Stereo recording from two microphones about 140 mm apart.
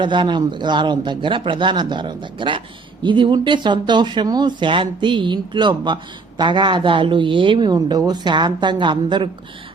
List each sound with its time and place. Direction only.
0.0 s speech: 35° right (ahead or behind)